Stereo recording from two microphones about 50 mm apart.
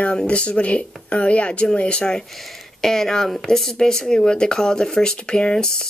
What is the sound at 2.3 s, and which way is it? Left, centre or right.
Speech, centre.